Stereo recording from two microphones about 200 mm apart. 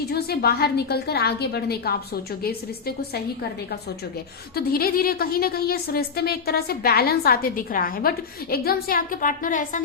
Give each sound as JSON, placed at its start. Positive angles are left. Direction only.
{"t": 0.1, "sound": "a woman's voice", "side_deg": 50}
{"t": 4.5, "sound": "a woman's voice", "side_deg": 50}